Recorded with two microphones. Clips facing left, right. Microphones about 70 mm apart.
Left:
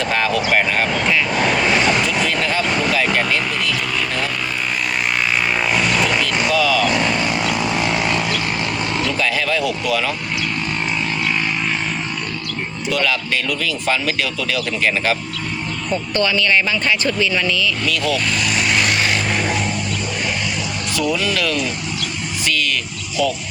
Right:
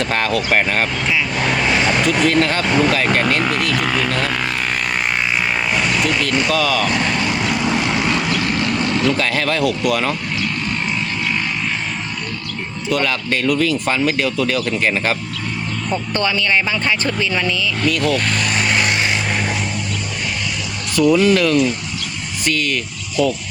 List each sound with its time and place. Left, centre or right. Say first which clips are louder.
0.1 s speech: left 2 dB; right
2.0 s a sound: right 4 dB; right
3.4 s vehicle: right 3 dB; right
6.2 s a sound: even; right
9.1 s speech: right 1 dB; right
13.0 s speech: even; right
18.0 s vehicle: right 1 dB; right
19.3 s vehicle: left 1 dB; centre
20.9 s speech: right 8 dB; right